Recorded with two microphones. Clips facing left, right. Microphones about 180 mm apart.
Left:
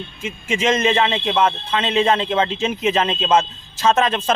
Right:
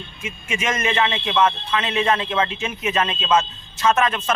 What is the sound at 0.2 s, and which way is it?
Speech, 30° left (ahead or behind).